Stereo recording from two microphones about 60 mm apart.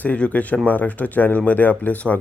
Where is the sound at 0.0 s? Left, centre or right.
Left.